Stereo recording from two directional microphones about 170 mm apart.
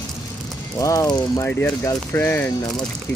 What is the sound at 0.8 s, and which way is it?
Speech, 20° left (ahead or behind).